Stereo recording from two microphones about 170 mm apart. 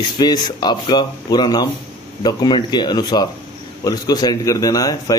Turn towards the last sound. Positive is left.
turn(degrees=20)  # may be behind; listen again after turning